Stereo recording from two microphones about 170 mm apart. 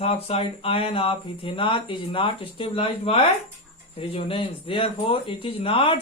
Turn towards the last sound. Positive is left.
turn(degrees=30)  # may be behind; listen again after turning